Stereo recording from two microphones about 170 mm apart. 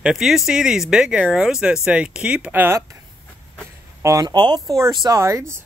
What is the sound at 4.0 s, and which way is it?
Speech, 20° right (ahead or behind).